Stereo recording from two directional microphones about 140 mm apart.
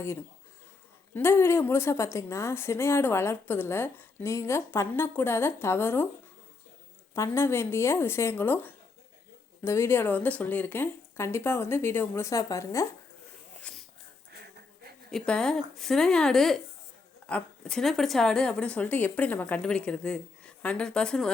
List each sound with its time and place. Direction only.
1.1 s a woman's voice: 15° left (ahead or behind)
7.2 s a woman's voice: 20° left (ahead or behind)
13.7 s a sound: 10° left (ahead or behind)
15.3 s a woman's voice: 5° left (ahead or behind)